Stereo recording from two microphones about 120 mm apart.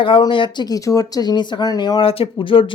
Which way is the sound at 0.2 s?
40° left (ahead or behind).